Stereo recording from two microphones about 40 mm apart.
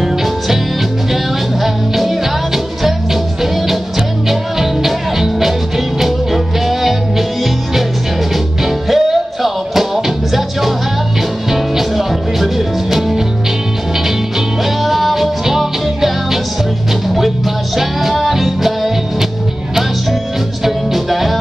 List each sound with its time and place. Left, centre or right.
0.0 s music: centre
4.3 s music: centre
8.6 s music: centre
14.6 s music: centre
17.7 s music: centre
20.6 s music: centre